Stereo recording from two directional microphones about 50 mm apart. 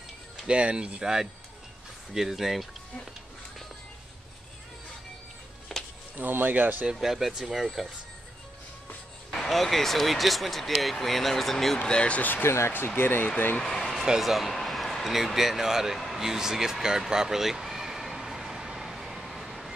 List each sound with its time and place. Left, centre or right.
0.5 s speech: right; by 2.6 s centre
5.7 s music: centre
6.1 s speech: right
6.9 s speech: centre
9.3 s speech: centre
11.8 s speech: left
12.2 s speech: left
12.4 s speech: left
13.7 s a sound: centre